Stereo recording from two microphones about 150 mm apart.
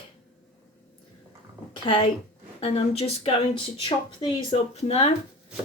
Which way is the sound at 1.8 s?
35° left (ahead or behind).